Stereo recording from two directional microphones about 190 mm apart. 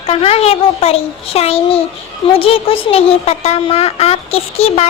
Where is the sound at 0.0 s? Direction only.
30° left (ahead or behind).